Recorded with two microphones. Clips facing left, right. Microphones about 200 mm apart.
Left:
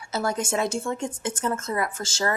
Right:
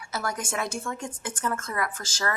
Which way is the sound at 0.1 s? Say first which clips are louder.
Left 5 dB; 25° left (ahead or behind).